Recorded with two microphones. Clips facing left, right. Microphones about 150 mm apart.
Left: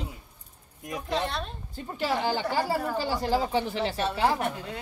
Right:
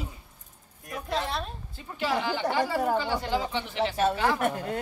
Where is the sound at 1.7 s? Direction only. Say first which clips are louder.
Even; 40° left (ahead or behind).